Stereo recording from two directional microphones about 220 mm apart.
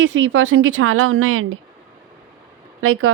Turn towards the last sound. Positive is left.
turn(degrees=-70)  # may be behind; listen again after turning